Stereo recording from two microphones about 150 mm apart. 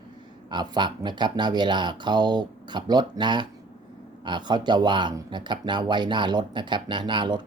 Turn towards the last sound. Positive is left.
turn(degrees=-30)  # may be behind; listen again after turning